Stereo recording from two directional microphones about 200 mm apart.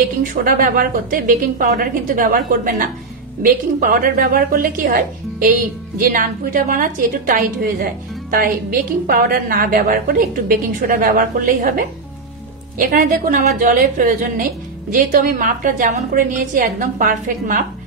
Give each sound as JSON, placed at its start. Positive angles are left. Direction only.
{"t": 0.2, "sound": "a woman's voice", "side_deg": -45}